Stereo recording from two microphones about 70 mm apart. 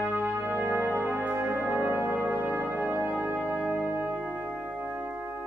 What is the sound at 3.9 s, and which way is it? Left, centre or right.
Music, right.